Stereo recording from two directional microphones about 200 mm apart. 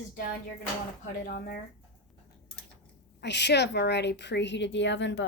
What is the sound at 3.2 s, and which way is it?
Speech, 60° left (ahead or behind).